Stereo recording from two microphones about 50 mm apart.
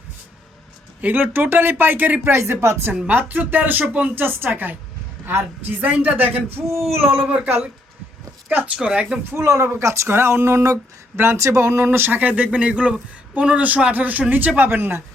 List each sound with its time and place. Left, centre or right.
1.0 s speech: right
2.2 s speech: right
3.1 s speech: right
5.2 s a woman's voice: right
5.6 s speech: right
6.6 s a sound: centre
7.3 s speech: right
8.7 s speech: right
9.3 s speech: right
10.1 s speech: right
11.9 s speech: right
12.2 s speech: right